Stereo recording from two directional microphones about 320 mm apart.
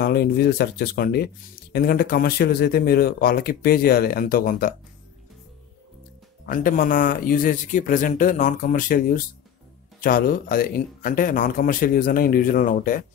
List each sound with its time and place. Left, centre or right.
0.0 s speech: left
6.4 s speech: left